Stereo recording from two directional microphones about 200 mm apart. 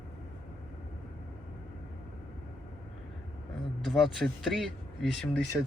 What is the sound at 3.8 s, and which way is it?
Speech, centre (ahead or behind).